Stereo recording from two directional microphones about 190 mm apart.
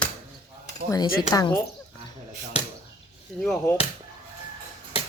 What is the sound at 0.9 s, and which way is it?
Speech, 20° left (ahead or behind).